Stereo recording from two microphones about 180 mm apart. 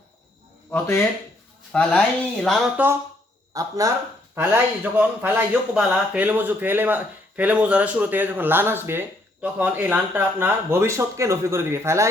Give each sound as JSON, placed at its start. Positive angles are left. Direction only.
{"t": 0.7, "sound": "speech", "side_deg": 15}
{"t": 2.8, "sound": "speech", "side_deg": -10}
{"t": 3.5, "sound": "speech", "side_deg": -20}